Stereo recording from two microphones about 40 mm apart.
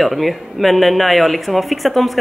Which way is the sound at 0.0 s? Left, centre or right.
Centre.